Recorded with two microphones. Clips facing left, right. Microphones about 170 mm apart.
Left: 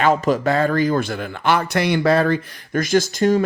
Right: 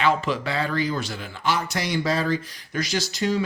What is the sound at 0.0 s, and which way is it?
Speech, 45° left (ahead or behind).